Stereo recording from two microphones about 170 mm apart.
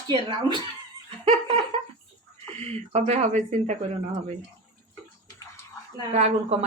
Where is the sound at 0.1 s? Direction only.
30° right (ahead or behind).